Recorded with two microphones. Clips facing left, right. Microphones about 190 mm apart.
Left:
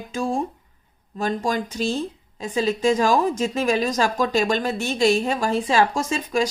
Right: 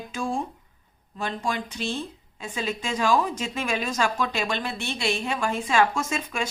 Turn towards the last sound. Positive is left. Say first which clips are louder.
# left 6 dB
turn(degrees=35)  # may be behind; listen again after turning